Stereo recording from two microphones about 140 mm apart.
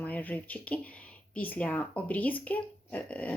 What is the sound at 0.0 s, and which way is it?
Speech, 10° left (ahead or behind).